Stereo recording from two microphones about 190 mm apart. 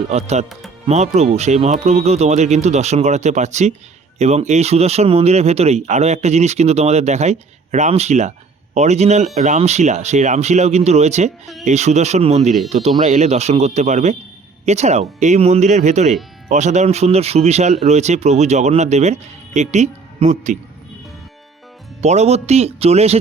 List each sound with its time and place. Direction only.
0.1 s speech: 35° right (ahead or behind)
22.0 s speech: 35° right (ahead or behind)